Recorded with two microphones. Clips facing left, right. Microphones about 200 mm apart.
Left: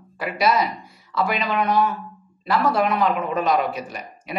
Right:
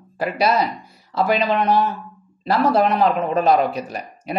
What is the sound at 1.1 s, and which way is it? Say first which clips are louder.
Speech: right 4 dB; 30° right (ahead or behind).